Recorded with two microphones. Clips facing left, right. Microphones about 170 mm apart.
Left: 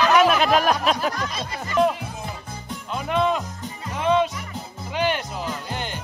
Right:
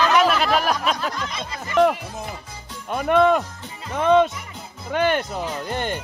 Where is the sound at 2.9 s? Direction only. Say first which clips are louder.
Right 6 dB; 55° right (ahead or behind).